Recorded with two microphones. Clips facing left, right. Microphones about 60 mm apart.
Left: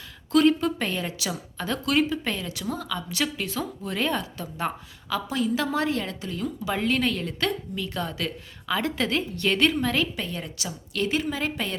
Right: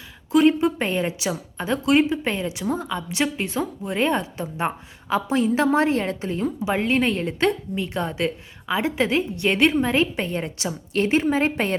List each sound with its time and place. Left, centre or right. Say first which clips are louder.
0.3 s speech: right 3 dB; centre; by 11.8 s right